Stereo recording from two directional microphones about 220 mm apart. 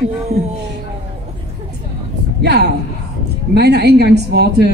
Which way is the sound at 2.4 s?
50° right (ahead or behind).